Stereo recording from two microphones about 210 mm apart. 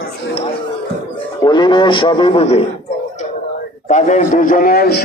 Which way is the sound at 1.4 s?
20° left (ahead or behind).